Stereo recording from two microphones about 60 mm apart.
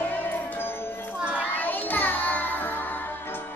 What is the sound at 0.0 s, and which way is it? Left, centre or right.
Music, left.